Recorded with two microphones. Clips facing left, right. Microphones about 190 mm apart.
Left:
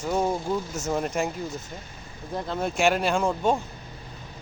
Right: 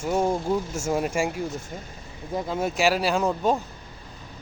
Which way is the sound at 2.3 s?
5° right (ahead or behind).